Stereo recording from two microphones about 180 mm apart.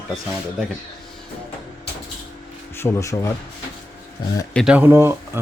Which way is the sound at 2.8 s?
15° left (ahead or behind).